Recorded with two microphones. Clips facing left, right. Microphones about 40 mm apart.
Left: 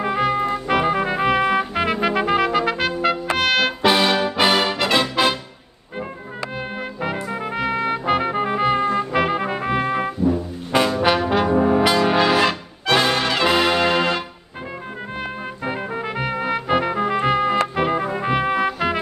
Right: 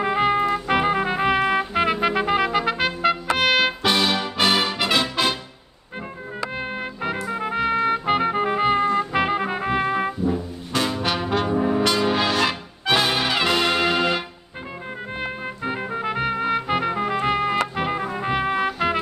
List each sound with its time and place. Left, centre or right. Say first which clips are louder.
0.0 s music: even; centre
3.8 s brass instrument: left 4 dB; centre
6.5 s trumpet: even; centre
8.8 s music: left 1 dB; centre
10.7 s trombone: left 5 dB; left
11.2 s brass instrument: left 4 dB; centre
11.5 s music: left 4 dB; centre
12.8 s music: left 2 dB; centre
13.5 s music: left 4 dB; centre
15.6 s music: even; centre